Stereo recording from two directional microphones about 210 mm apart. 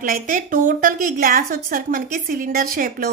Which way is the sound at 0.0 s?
40° right (ahead or behind).